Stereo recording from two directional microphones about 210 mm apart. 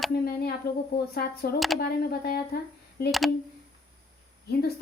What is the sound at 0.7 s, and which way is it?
Speech, 45° left (ahead or behind).